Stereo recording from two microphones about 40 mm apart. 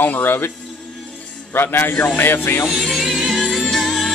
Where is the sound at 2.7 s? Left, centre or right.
Centre.